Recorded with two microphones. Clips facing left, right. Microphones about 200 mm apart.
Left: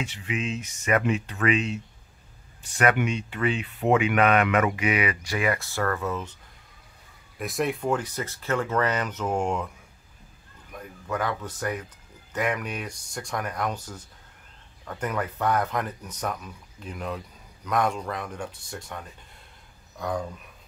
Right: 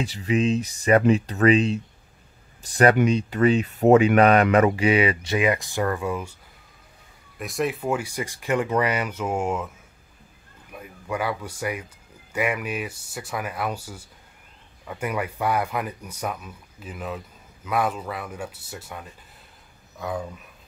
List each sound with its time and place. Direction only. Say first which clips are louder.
0.0 s speech: right 8 dB; 35° right (ahead or behind); by 6.3 s 10° right (ahead or behind)
7.3 s speech: right 1 dB; centre (ahead or behind)
10.7 s speech: right 1 dB; 10° right (ahead or behind)